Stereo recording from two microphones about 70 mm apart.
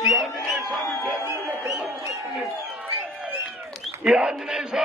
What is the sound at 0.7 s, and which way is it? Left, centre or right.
Speech, centre.